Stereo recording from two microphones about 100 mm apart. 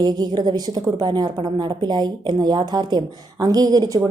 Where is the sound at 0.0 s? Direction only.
45° right (ahead or behind).